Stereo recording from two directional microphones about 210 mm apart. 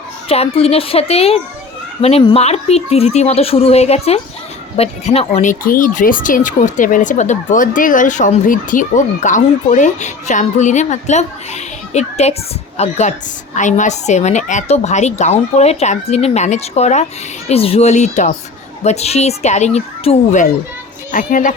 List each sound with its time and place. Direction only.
0.3 s speech: 25° left (ahead or behind)